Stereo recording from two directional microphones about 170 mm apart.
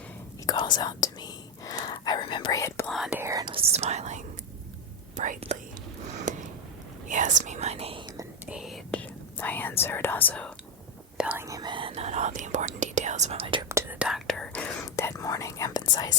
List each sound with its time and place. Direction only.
0.4 s whispering: 25° left (ahead or behind)
3.1 s speech: 15° right (ahead or behind)
3.5 s speech: 40° right (ahead or behind)
6.3 s a sound: 50° right (ahead or behind)
7.1 s speech: 45° right (ahead or behind)
8.4 s whispering: 5° right (ahead or behind)
9.4 s speech: 10° left (ahead or behind)
11.2 s speech: 10° right (ahead or behind)
11.4 s speech: 25° right (ahead or behind)
13.7 s speech: 15° right (ahead or behind)
14.1 s speech: 5° left (ahead or behind)
14.9 s speech: 20° left (ahead or behind)